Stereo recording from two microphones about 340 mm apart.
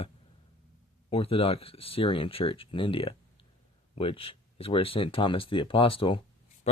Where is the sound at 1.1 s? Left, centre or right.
Centre.